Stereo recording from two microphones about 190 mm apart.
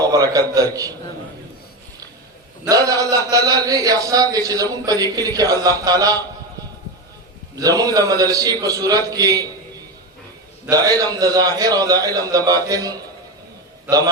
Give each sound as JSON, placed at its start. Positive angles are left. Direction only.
{"t": 0.0, "sound": "a man's voice", "side_deg": -20}
{"t": 2.6, "sound": "a man's voice", "side_deg": -20}
{"t": 7.5, "sound": "a man's voice", "side_deg": -20}
{"t": 10.7, "sound": "a man's voice", "side_deg": -20}